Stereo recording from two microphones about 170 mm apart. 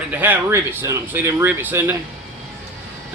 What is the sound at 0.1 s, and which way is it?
Speech, 10° right (ahead or behind).